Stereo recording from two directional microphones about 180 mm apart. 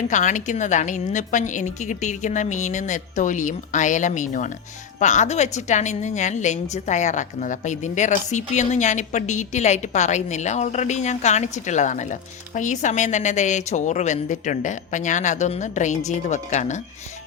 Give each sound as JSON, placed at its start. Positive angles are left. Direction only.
{"t": 0.1, "sound": "a woman's voice", "side_deg": 45}